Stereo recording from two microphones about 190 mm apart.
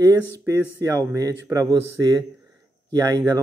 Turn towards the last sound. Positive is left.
turn(degrees=-15)  # may be behind; listen again after turning